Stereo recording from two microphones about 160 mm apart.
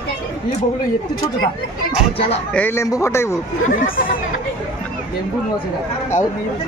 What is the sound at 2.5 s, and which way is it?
Speech, 15° left (ahead or behind).